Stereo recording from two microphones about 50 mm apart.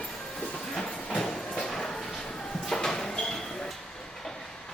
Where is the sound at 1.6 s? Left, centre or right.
Centre.